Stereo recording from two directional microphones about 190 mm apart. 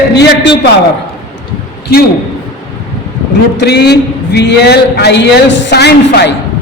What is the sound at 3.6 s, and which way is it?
A man's voice, 60° left (ahead or behind).